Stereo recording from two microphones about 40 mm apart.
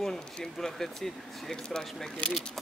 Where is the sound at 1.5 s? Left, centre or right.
Centre.